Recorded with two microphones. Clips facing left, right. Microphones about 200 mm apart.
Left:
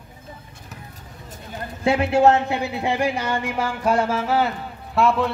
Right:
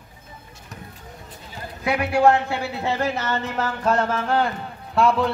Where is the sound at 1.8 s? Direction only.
25° left (ahead or behind).